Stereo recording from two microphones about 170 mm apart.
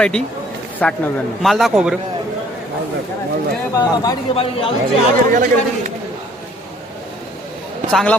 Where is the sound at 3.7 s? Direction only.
20° left (ahead or behind).